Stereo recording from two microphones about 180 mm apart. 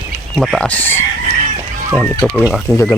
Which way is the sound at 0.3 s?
Centre (ahead or behind).